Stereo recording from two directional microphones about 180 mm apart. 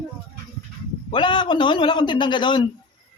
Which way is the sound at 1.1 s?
25° left (ahead or behind).